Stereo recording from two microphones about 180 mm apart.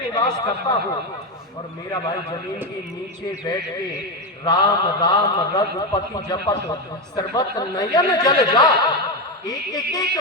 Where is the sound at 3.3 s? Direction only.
25° left (ahead or behind).